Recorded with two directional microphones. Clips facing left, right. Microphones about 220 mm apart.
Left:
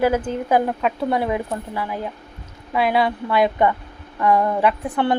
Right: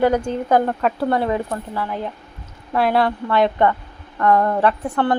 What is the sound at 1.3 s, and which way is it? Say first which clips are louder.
Speech: right 1 dB; 10° left (ahead or behind).